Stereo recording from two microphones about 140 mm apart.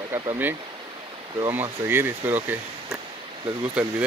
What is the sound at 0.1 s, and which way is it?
Speech, 30° right (ahead or behind).